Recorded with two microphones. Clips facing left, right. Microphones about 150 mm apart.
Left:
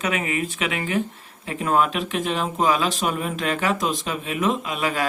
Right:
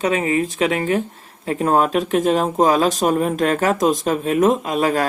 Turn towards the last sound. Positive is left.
turn(degrees=-45)  # may be behind; listen again after turning